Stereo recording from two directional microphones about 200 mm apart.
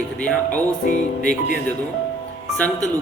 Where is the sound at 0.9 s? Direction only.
40° left (ahead or behind).